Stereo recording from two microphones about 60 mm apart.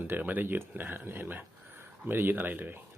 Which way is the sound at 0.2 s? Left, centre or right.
Right.